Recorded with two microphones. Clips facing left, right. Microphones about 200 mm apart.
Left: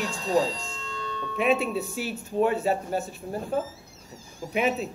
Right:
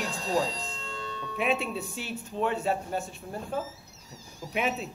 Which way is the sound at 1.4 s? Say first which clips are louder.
Left 5 dB; centre (ahead or behind).